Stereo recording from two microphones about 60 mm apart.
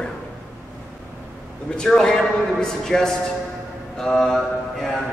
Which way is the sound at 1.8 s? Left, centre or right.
Centre.